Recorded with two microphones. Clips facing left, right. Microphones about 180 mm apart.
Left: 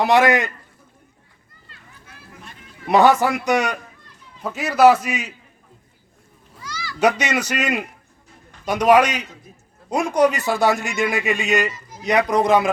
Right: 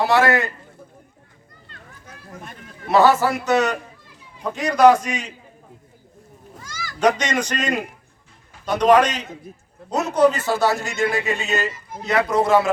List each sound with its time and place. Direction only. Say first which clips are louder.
0.0 s a man's voice: left 2 dB; 20° left (ahead or behind)
2.8 s a man's voice: left 1 dB; 15° left (ahead or behind)
6.6 s children playing: left 2 dB; 45° right (ahead or behind)
7.2 s a man's voice: left 1 dB; 10° left (ahead or behind)
11.7 s a man's voice: right 4 dB; 60° right (ahead or behind)
12.0 s a man's voice: left 2 dB; 15° left (ahead or behind)